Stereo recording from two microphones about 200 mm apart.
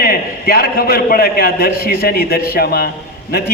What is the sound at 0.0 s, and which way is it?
A man's voice, 50° left (ahead or behind).